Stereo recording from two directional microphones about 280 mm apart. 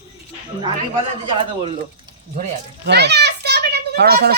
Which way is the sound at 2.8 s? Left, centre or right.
Right.